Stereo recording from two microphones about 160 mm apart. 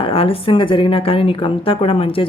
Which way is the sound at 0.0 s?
35° left (ahead or behind).